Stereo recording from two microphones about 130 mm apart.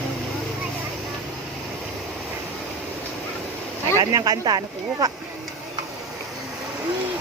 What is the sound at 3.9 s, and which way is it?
Speech, 25° right (ahead or behind).